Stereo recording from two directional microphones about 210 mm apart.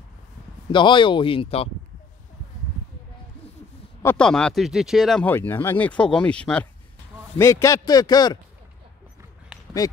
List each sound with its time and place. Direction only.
0.7 s speech: 20° left (ahead or behind)
4.0 s a man's voice: 5° left (ahead or behind)
9.5 s a sound: 5° right (ahead or behind)